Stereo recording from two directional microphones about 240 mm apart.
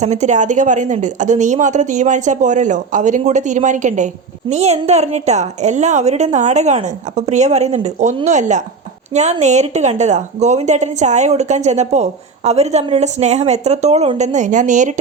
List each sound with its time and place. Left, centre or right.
0.0 s a woman's voice: right